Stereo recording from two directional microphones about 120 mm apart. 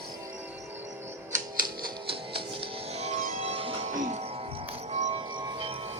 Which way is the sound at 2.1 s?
50° right (ahead or behind).